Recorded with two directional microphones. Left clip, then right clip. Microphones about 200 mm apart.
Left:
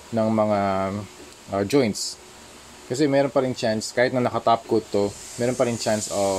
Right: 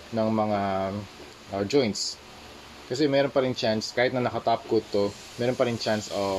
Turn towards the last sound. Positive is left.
turn(degrees=30)  # may be behind; listen again after turning